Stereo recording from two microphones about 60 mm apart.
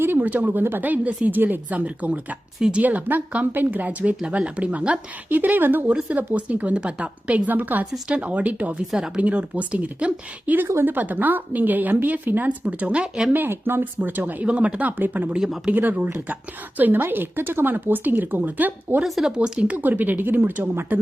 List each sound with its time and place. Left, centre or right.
0.0 s a sound: right
0.3 s speech: right
5.3 s speech: right; by 13.3 s centre
13.3 s a woman's voice: right
19.0 s speech: centre
19.5 s a woman's voice: right